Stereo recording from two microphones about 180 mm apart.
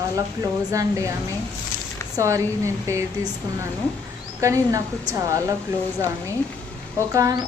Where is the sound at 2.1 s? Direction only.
15° right (ahead or behind).